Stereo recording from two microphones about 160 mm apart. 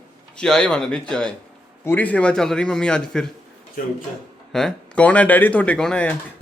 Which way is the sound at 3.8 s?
60° left (ahead or behind).